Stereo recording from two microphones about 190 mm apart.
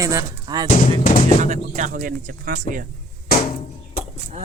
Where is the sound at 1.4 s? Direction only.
40° right (ahead or behind).